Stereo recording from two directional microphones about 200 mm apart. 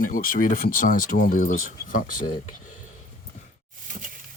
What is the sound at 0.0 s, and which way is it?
Speech, 45° left (ahead or behind).